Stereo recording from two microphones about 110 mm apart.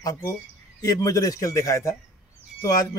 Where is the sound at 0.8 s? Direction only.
35° left (ahead or behind).